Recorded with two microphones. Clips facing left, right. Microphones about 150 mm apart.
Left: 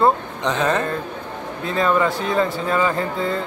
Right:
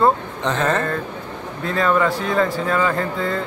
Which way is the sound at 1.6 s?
25° left (ahead or behind).